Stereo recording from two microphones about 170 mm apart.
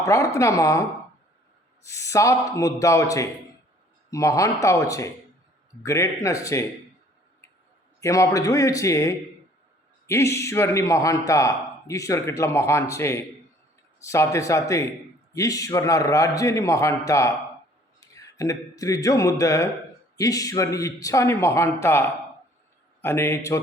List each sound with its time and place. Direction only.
0.0 s a woman's voice: 20° left (ahead or behind)
8.0 s a man's voice: 20° left (ahead or behind)